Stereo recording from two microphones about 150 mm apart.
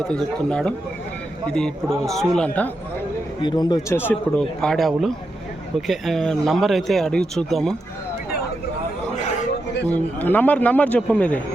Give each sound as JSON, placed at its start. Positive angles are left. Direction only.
{"t": 0.1, "sound": "a man's voice", "side_deg": 5}
{"t": 3.4, "sound": "speech", "side_deg": 30}
{"t": 3.9, "sound": "speech", "side_deg": 15}
{"t": 9.8, "sound": "a man's voice", "side_deg": 10}